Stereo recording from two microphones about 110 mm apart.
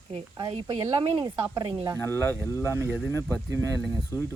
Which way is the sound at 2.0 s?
20° left (ahead or behind).